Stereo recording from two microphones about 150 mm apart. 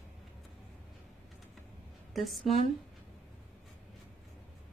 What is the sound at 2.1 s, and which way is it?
Speech, centre (ahead or behind).